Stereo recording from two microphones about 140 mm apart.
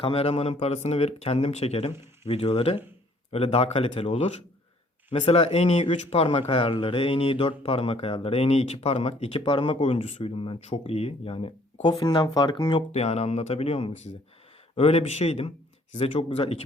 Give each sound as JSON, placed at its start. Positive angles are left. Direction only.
{"t": 0.0, "sound": "speech", "side_deg": 45}
{"t": 11.9, "sound": "speech", "side_deg": 30}
{"t": 12.9, "sound": "speech", "side_deg": 50}